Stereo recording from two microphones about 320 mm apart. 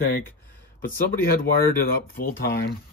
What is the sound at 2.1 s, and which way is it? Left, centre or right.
Speech, left.